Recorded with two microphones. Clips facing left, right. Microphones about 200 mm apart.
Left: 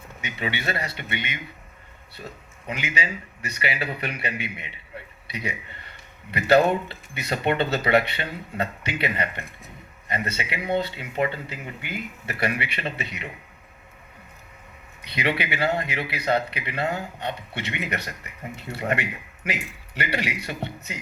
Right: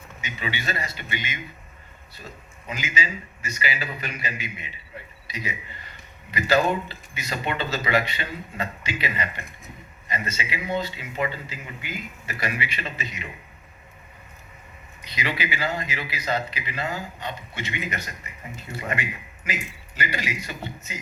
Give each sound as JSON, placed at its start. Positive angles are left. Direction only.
{"t": 0.2, "sound": "a man's voice", "side_deg": 60}
{"t": 15.0, "sound": "a man's voice", "side_deg": 60}